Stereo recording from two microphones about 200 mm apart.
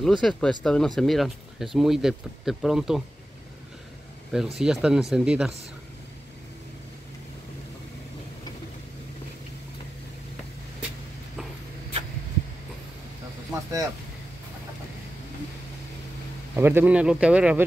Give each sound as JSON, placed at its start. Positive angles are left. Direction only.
{"t": 0.0, "sound": "speech", "side_deg": 5}
{"t": 4.6, "sound": "speech", "side_deg": -5}
{"t": 13.5, "sound": "vehicle", "side_deg": -15}
{"t": 16.5, "sound": "speech", "side_deg": -10}